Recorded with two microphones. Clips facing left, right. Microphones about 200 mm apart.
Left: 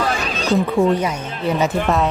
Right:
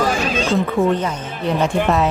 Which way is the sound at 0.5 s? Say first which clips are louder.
Left 3 dB; centre (ahead or behind).